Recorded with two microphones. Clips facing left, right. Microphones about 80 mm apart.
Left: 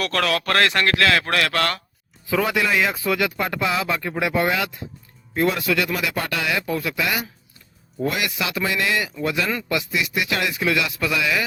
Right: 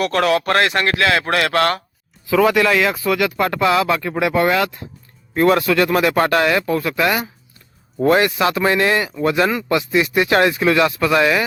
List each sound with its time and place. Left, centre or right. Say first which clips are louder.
0.1 s speech: right 5 dB; right
2.2 s speech: right 7 dB; right